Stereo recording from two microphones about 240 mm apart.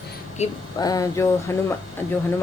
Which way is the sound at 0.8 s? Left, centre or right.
Centre.